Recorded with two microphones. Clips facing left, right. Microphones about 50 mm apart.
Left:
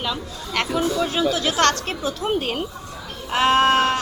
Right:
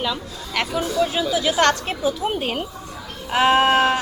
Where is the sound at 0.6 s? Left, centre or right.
Centre.